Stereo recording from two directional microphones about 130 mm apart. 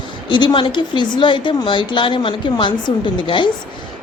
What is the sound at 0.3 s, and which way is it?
A woman's voice, 35° left (ahead or behind).